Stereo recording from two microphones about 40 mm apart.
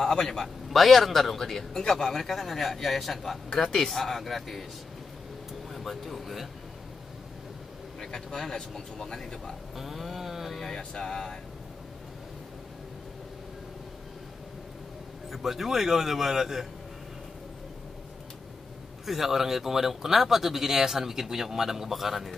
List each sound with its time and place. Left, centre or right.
0.0 s speech: centre
0.7 s a man's voice: centre
5.5 s air conditioning: centre
8.0 s speech: centre
9.8 s a man's voice: centre
10.8 s speech: centre
15.3 s speech: centre
19.0 s speech: centre